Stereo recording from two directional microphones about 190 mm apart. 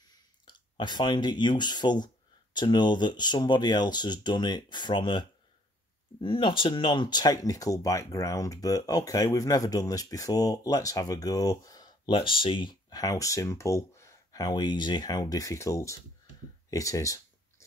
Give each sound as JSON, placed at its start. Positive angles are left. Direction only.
{"t": 0.5, "sound": "speech", "side_deg": 20}
{"t": 6.2, "sound": "speech", "side_deg": 25}
{"t": 16.7, "sound": "a sound", "side_deg": 15}